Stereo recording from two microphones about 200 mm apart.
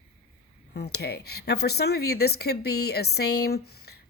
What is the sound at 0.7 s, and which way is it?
A woman's voice, 55° left (ahead or behind).